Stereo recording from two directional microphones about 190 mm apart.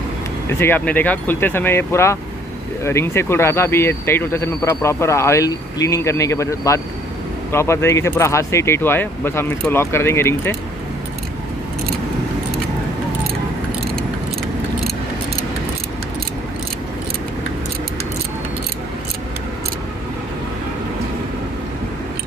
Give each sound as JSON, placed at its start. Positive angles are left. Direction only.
{"t": 0.5, "sound": "speech", "side_deg": 10}